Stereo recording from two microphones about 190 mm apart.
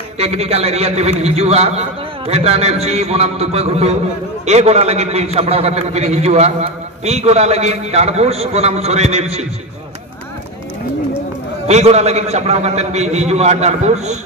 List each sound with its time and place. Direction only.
0.2 s a man's voice: 30° right (ahead or behind)
11.6 s a man's voice: 35° right (ahead or behind)